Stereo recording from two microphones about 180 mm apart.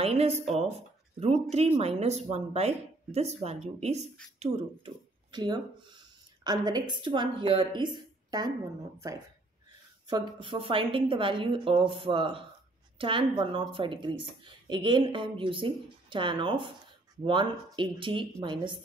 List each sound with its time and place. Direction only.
0.0 s a woman's voice: 35° right (ahead or behind)
10.0 s a woman's voice: 25° right (ahead or behind)